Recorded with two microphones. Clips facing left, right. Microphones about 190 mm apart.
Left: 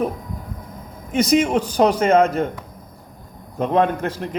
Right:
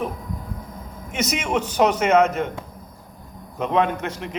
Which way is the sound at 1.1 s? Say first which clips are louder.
Left 7 dB; 35° left (ahead or behind).